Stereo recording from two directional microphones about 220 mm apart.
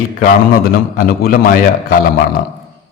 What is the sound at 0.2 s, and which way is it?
A man's voice, 40° left (ahead or behind).